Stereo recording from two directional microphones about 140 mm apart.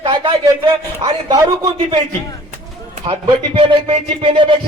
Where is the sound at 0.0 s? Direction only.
35° right (ahead or behind).